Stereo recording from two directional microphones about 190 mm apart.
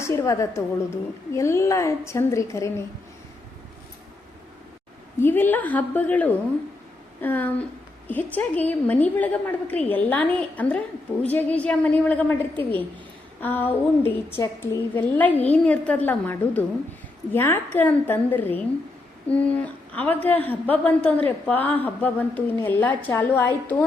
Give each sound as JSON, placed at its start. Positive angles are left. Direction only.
{"t": 0.0, "sound": "a woman's voice", "side_deg": 15}
{"t": 5.2, "sound": "a woman's voice", "side_deg": 10}
{"t": 20.0, "sound": "a woman's voice", "side_deg": 10}